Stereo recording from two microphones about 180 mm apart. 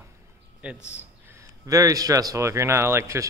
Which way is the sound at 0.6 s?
5° right (ahead or behind).